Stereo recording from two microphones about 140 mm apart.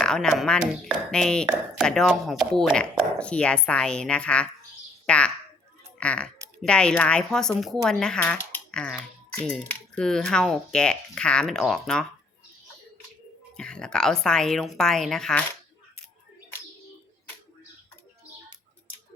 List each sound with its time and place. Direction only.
0.0 s a woman's voice: 5° left (ahead or behind)
13.6 s speech: 5° left (ahead or behind)